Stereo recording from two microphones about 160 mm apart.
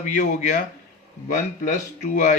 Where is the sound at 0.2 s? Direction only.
55° left (ahead or behind).